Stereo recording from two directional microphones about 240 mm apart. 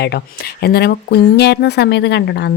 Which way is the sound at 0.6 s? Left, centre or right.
Left.